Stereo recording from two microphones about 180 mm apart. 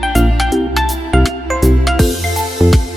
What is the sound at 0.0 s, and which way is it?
Music, centre (ahead or behind).